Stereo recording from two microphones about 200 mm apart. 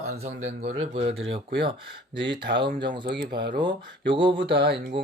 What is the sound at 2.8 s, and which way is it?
Speech, 25° right (ahead or behind).